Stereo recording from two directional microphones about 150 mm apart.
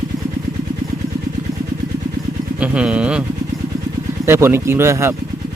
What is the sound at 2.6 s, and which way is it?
Speech, 5° right (ahead or behind).